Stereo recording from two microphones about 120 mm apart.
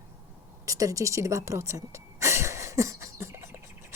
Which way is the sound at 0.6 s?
30° right (ahead or behind).